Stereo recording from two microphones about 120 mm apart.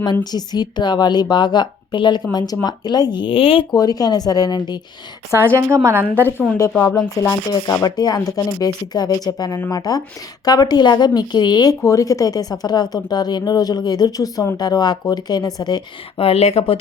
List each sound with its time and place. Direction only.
0.0 s a woman's voice: 35° left (ahead or behind)
3.8 s a woman's voice: 30° left (ahead or behind)
5.5 s a woman's voice: 25° right (ahead or behind)
7.1 s a woman's voice: 25° left (ahead or behind)
16.2 s speech: 55° left (ahead or behind)